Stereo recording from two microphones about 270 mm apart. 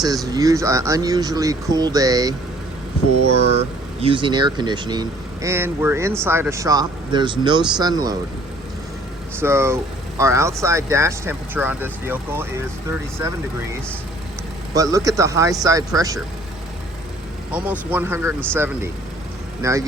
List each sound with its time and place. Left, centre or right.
0.0 s speech: centre
3.3 s speech: right
9.4 s speech: centre
14.7 s speech: centre
17.5 s speech: centre